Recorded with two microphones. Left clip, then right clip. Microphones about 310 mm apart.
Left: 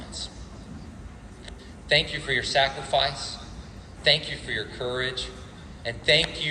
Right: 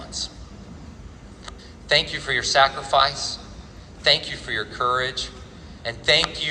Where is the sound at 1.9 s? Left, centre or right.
Right.